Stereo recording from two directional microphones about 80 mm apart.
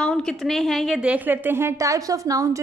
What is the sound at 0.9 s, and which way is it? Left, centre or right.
A woman's voice, centre.